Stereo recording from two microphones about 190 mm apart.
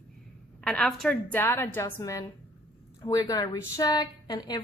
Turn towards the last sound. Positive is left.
turn(degrees=20)  # may be behind; listen again after turning